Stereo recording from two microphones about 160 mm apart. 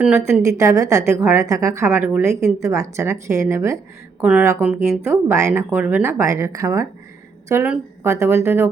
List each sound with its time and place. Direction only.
0.3 s a woman's voice: 20° right (ahead or behind)